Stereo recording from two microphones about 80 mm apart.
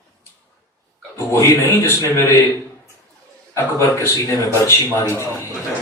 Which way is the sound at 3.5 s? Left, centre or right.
Left.